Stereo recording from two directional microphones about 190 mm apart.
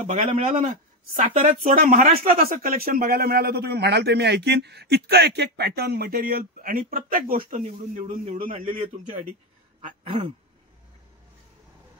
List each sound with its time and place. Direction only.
0.0 s a man's voice: 40° right (ahead or behind)